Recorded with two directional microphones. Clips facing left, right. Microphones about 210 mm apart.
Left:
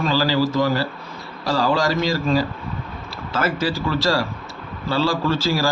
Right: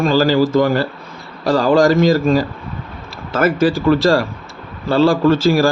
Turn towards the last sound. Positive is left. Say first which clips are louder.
# right 8 dB
turn(degrees=-55)  # may be behind; listen again after turning